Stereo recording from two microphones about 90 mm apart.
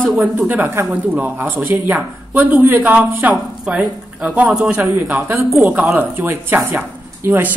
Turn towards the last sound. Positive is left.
turn(degrees=-20)  # may be behind; listen again after turning